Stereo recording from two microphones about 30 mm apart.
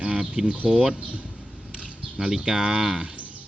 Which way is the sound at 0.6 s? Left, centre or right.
Centre.